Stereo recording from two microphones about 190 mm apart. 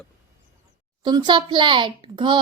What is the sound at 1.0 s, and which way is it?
A child's voice, 25° right (ahead or behind).